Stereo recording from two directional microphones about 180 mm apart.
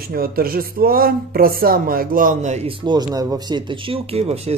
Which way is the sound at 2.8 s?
25° right (ahead or behind).